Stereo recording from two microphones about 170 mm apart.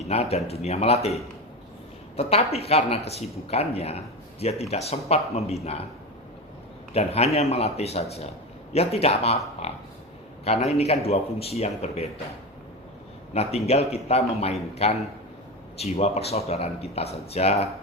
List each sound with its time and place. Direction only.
0.0 s speech: 35° left (ahead or behind)
6.9 s speech: 40° left (ahead or behind)
13.3 s speech: 35° left (ahead or behind)